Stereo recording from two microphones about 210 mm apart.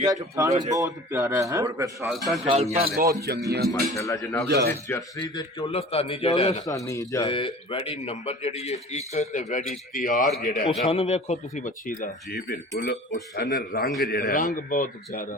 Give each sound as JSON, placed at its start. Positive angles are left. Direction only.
{"t": 0.0, "sound": "a man's voice", "side_deg": -15}
{"t": 2.0, "sound": "a man's voice", "side_deg": 0}
{"t": 2.4, "sound": "speech", "side_deg": -25}
{"t": 2.8, "sound": "speech", "side_deg": -45}
{"t": 3.7, "sound": "a man's voice", "side_deg": 15}
{"t": 4.4, "sound": "speech", "side_deg": -55}
{"t": 4.9, "sound": "a man's voice", "side_deg": 15}